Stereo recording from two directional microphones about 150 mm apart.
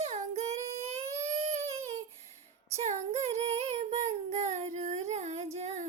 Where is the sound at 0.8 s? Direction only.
45° right (ahead or behind).